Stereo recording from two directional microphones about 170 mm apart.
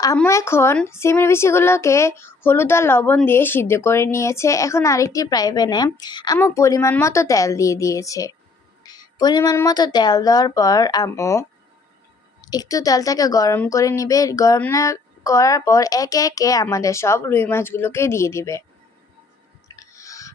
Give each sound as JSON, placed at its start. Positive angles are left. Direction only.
{"t": 0.3, "sound": "a woman's voice", "side_deg": 15}
{"t": 19.6, "sound": "music", "side_deg": 20}